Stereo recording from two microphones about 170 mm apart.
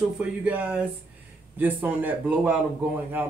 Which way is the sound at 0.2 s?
10° right (ahead or behind).